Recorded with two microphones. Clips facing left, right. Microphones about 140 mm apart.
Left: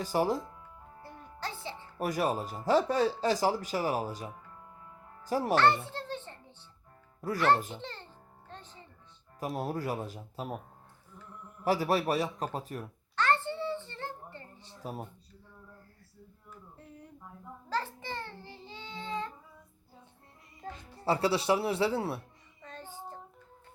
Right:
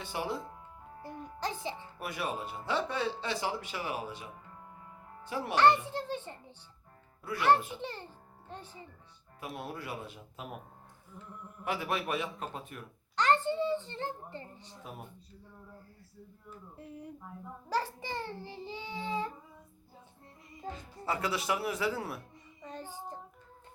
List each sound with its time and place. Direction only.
0.0 s speech: 40° left (ahead or behind)
1.0 s music: 15° right (ahead or behind)
2.0 s a child's voice: 40° left (ahead or behind)
5.5 s a child's voice: 15° right (ahead or behind)
9.4 s speech: 40° left (ahead or behind)
11.6 s speech: 35° left (ahead or behind)
13.1 s a sound: 15° right (ahead or behind)
16.7 s a child's voice: 10° right (ahead or behind)
21.0 s speech: 30° left (ahead or behind)
22.6 s child singing: 15° right (ahead or behind)